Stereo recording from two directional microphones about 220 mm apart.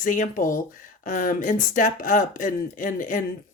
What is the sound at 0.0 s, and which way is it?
Speech, 40° left (ahead or behind).